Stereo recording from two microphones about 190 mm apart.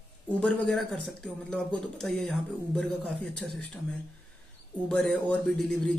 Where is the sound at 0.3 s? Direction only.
5° left (ahead or behind).